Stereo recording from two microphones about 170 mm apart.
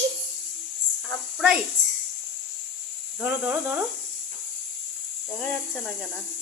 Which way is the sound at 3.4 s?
10° right (ahead or behind).